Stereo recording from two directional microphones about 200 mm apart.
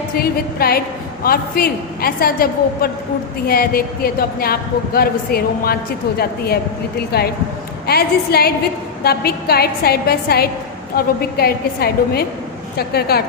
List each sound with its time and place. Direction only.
0.2 s a woman's voice: 50° left (ahead or behind)